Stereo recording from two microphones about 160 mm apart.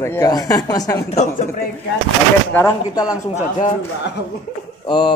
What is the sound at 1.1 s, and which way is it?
Speech, 50° left (ahead or behind).